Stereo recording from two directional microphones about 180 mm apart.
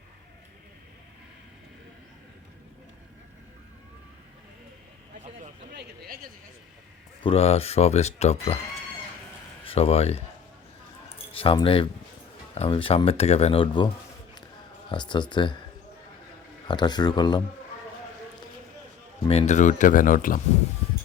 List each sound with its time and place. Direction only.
5.7 s speech: 55° right (ahead or behind)
7.2 s speech: 30° left (ahead or behind)
9.6 s speech: 35° left (ahead or behind)
11.3 s speech: 30° left (ahead or behind)
16.6 s speech: 25° left (ahead or behind)
19.3 s speech: 40° left (ahead or behind)